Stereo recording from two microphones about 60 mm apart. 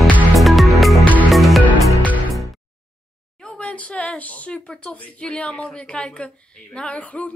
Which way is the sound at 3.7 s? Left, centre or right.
Left.